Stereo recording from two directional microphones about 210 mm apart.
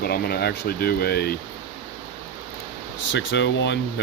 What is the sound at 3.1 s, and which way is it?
Speech, 60° left (ahead or behind).